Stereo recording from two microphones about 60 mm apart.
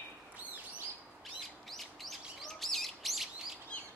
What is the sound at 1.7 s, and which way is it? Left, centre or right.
Bird, centre.